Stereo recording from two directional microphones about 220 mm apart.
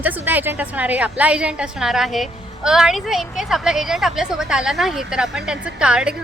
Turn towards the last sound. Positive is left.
turn(degrees=-5)  # may be behind; listen again after turning